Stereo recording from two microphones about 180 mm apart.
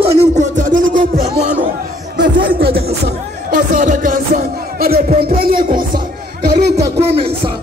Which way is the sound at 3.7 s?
45° right (ahead or behind).